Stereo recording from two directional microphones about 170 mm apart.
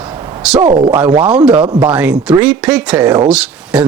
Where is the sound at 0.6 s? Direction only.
30° right (ahead or behind).